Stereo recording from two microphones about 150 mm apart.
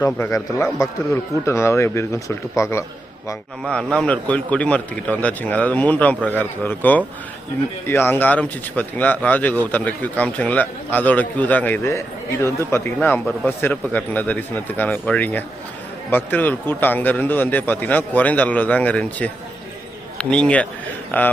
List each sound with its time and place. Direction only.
0.2 s speech: 20° left (ahead or behind)
3.6 s speech: 5° left (ahead or behind)